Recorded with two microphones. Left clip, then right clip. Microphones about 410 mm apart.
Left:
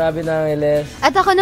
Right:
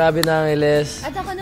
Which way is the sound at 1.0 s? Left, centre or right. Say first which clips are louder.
Left 13 dB; left.